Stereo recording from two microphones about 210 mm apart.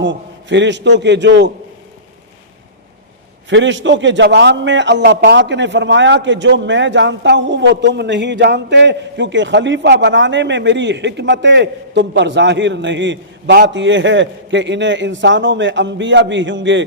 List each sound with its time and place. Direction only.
0.0 s a man's voice: 60° right (ahead or behind)
3.5 s a man's voice: 60° right (ahead or behind)